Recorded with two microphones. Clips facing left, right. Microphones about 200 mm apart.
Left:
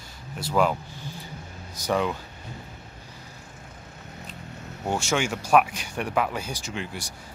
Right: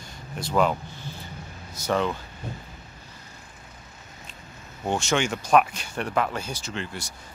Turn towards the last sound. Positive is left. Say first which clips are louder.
# even
turn(degrees=15)  # may be behind; listen again after turning